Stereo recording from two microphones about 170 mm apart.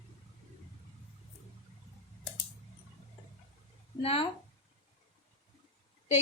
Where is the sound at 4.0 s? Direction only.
35° left (ahead or behind).